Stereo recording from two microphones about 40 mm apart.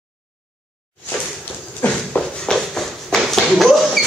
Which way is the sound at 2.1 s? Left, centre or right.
Left.